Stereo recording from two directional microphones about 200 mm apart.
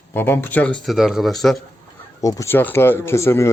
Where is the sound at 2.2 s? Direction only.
15° left (ahead or behind).